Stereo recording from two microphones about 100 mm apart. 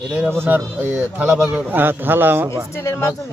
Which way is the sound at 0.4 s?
20° right (ahead or behind).